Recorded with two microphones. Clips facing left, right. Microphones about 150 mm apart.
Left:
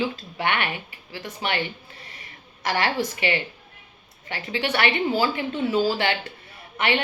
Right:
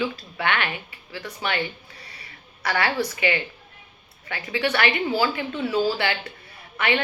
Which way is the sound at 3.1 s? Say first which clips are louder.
Right 1 dB; 30° left (ahead or behind).